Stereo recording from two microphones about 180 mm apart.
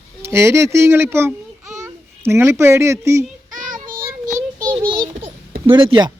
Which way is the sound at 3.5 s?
45° right (ahead or behind).